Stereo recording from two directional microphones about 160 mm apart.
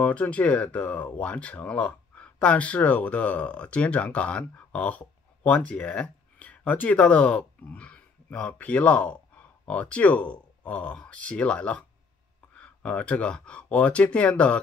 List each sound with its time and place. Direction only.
0.0 s speech: 10° left (ahead or behind)